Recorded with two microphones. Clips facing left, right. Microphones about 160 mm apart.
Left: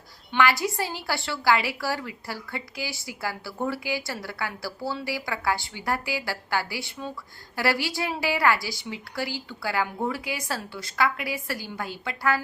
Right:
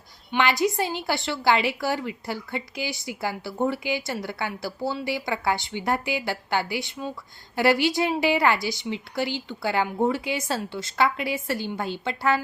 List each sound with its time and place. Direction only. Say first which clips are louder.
0.3 s a woman's voice: right 1 dB; 20° right (ahead or behind)